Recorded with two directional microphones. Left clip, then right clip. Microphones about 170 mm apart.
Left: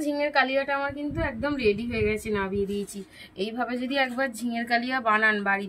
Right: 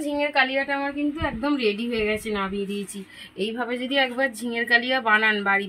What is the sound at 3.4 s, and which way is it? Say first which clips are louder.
A woman's voice: right 2 dB; 25° left (ahead or behind).